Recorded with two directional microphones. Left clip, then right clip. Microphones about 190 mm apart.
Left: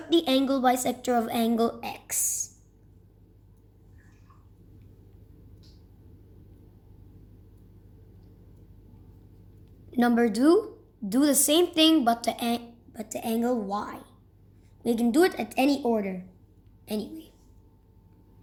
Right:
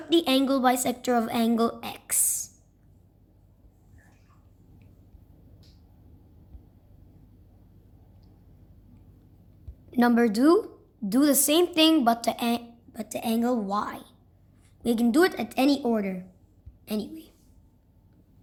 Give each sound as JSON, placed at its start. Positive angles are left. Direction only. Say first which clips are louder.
{"t": 0.1, "sound": "a woman's voice", "louder": "right 1 dB", "side_deg": -20}
{"t": 9.9, "sound": "a woman's voice", "louder": "right 1 dB", "side_deg": -20}